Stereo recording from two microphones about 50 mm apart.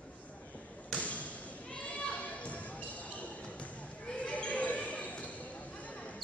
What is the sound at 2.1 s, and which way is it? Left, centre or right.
Basketball bounce, left.